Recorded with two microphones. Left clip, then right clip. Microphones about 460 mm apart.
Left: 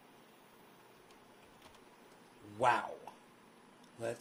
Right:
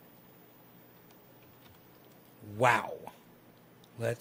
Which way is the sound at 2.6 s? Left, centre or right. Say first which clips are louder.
Right 5 dB; right.